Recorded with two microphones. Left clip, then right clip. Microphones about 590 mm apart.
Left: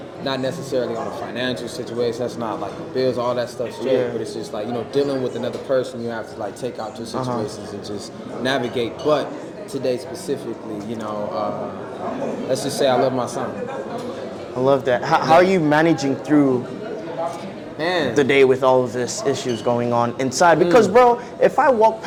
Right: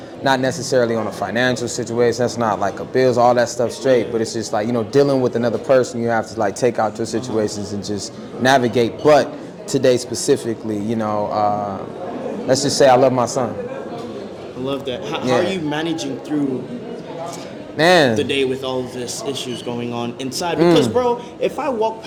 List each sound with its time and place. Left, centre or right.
0.3 s speech: right
12.5 s speech: right
14.7 s speech: left
17.7 s speech: right
18.1 s speech: left